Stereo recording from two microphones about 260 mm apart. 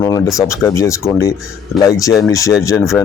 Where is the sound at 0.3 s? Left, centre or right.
Centre.